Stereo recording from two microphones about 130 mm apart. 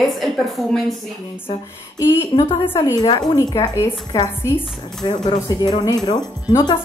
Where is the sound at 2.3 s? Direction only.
40° left (ahead or behind).